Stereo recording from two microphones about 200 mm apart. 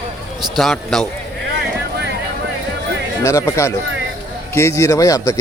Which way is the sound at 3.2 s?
15° left (ahead or behind).